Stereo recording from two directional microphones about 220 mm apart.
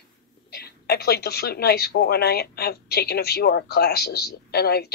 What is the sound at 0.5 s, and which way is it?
Speech, 45° left (ahead or behind).